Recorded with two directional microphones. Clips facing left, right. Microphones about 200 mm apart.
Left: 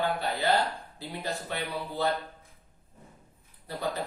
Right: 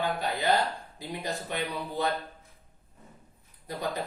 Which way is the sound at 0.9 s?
15° right (ahead or behind).